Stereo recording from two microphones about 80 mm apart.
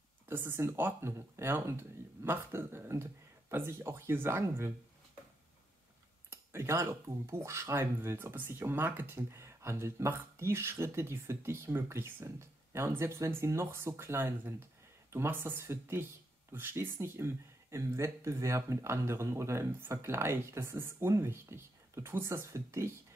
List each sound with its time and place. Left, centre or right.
0.3 s speech: right
6.3 s speech: right